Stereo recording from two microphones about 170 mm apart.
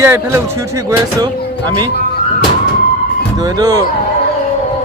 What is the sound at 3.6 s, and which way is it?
Speech, 20° right (ahead or behind).